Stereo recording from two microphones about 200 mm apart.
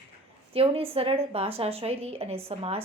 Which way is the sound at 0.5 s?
30° right (ahead or behind).